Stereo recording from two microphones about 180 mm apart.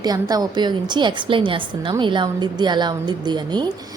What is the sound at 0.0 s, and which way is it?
A woman's voice, 20° right (ahead or behind).